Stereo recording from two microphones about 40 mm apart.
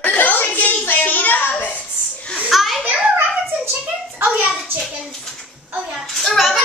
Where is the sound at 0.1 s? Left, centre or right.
Left.